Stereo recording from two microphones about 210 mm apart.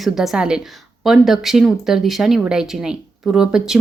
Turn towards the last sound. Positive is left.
turn(degrees=-5)  # may be behind; listen again after turning